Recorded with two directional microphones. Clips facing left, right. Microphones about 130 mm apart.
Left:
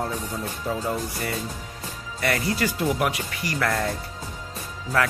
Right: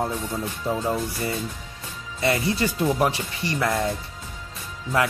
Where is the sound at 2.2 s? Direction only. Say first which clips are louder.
Right 2 dB; 25° right (ahead or behind).